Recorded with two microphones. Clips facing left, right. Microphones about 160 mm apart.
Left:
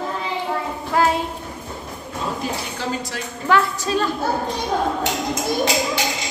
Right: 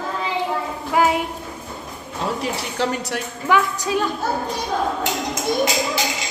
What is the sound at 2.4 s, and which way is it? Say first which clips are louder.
Speech: right 3 dB; 70° right (ahead or behind).